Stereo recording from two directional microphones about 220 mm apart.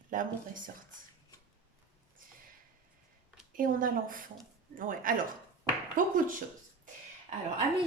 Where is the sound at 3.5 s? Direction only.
40° right (ahead or behind).